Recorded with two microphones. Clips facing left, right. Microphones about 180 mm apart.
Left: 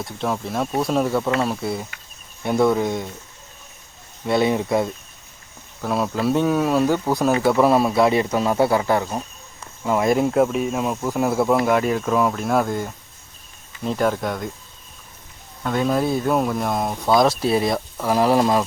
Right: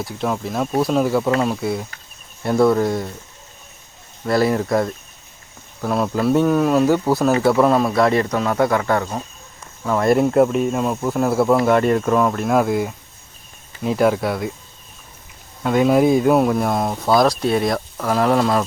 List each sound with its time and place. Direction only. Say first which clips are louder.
0.0 s speech: right 2 dB; centre (ahead or behind)
4.3 s speech: right 1 dB; centre (ahead or behind)
8.5 s speech: right 1 dB; 30° left (ahead or behind)
10.1 s speech: right 4 dB; centre (ahead or behind)
15.6 s speech: right 6 dB; 10° right (ahead or behind); by 18.6 s 15° left (ahead or behind)